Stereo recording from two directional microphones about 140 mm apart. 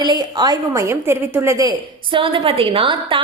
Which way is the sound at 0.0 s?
30° right (ahead or behind).